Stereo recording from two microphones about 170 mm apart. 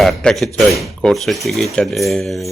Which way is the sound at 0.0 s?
Centre (ahead or behind).